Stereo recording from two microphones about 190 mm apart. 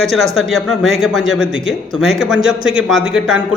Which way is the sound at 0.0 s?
Centre (ahead or behind).